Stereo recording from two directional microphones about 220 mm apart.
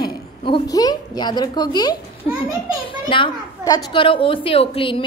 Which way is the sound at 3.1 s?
20° left (ahead or behind).